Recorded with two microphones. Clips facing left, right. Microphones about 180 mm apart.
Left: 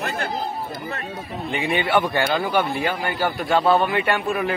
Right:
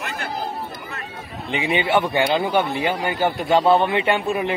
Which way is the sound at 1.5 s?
20° right (ahead or behind).